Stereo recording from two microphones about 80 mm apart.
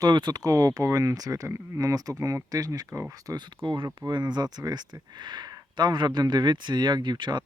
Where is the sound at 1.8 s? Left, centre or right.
Right.